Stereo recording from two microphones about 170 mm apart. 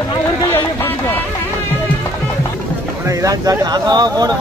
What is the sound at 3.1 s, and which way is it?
Speech, 20° right (ahead or behind).